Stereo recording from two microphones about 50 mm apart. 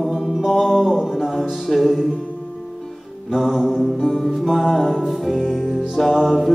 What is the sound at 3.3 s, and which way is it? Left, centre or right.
Music, centre.